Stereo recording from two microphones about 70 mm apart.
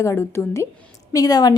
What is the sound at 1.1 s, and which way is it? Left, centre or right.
Speech, left.